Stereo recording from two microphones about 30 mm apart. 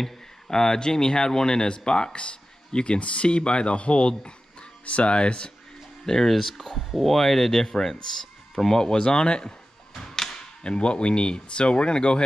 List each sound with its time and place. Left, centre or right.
0.5 s speech: left
6.0 s speech: centre; by 9.5 s left
9.9 s a sound: centre
10.6 s speech: left